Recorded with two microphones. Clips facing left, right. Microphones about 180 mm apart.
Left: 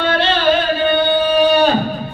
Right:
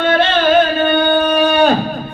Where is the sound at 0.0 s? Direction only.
50° right (ahead or behind).